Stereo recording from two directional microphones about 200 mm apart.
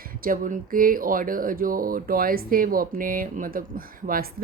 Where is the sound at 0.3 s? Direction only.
45° right (ahead or behind).